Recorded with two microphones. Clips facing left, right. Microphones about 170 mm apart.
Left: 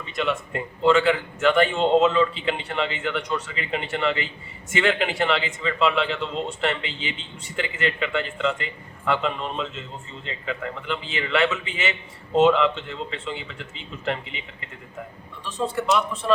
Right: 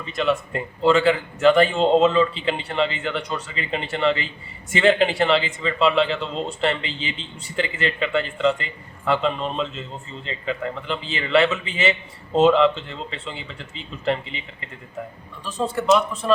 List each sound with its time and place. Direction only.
0.9 s a man's voice: 35° right (ahead or behind)
15.4 s a man's voice: 40° right (ahead or behind)